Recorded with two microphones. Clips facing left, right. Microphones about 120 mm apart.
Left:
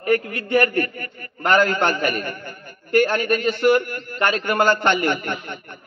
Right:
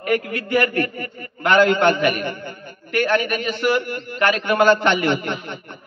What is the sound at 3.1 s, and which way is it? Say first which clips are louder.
A man's voice: even; 40° left (ahead or behind).